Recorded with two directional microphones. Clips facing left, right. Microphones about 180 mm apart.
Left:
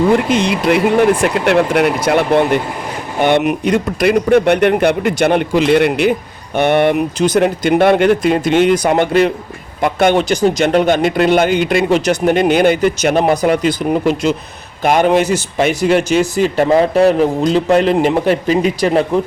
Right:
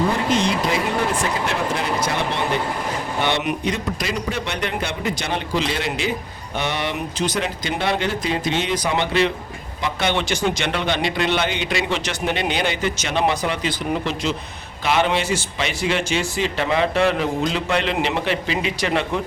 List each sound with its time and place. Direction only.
0.3 s speech: 65° left (ahead or behind); by 19.2 s 40° left (ahead or behind)